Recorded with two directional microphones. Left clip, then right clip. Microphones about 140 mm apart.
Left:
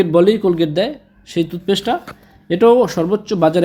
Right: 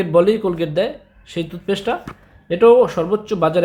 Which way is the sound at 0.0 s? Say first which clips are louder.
Left 2 dB; 30° left (ahead or behind).